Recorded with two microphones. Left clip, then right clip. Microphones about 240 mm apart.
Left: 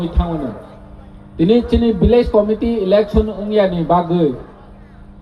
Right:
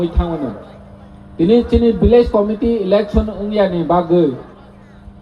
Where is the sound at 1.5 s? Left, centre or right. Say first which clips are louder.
Right 2 dB; left.